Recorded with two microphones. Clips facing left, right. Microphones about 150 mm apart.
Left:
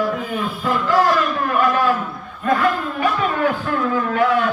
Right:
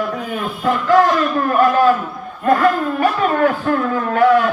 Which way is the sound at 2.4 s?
45° right (ahead or behind).